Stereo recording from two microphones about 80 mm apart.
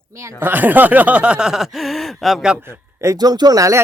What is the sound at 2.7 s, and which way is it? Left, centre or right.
Speech, right.